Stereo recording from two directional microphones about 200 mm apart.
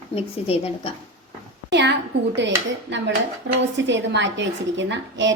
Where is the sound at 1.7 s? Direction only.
60° right (ahead or behind).